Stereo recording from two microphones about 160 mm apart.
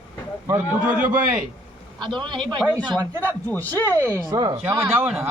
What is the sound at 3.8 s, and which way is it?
Speech, 20° right (ahead or behind).